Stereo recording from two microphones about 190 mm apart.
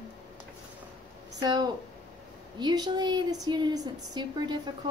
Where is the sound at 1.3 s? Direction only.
20° right (ahead or behind).